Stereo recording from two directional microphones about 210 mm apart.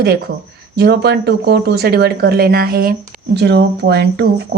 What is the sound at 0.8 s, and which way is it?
Speech, 50° right (ahead or behind).